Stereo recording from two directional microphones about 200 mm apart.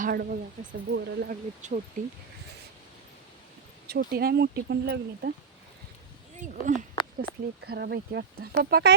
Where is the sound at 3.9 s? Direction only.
50° right (ahead or behind).